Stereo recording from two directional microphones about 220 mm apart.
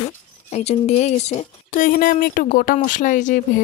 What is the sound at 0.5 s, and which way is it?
Speech, 30° left (ahead or behind).